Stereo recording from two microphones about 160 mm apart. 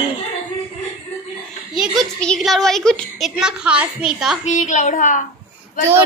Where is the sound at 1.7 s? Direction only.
5° right (ahead or behind).